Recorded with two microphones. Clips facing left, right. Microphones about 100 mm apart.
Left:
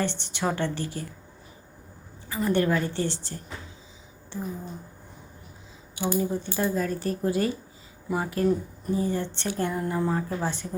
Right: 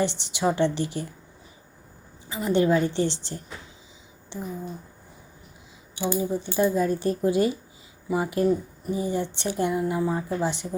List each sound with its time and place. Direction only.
0.0 s a woman's voice: 15° right (ahead or behind)
2.3 s speech: 20° right (ahead or behind)
6.1 s a woman's voice: 20° right (ahead or behind)
9.8 s speech: 5° right (ahead or behind)
10.2 s a woman's voice: 15° right (ahead or behind)